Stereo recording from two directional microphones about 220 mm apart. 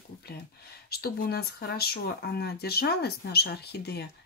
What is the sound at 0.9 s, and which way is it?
Speech, 45° left (ahead or behind).